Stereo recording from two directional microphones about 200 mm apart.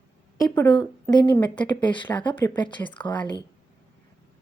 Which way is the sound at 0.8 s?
20° left (ahead or behind).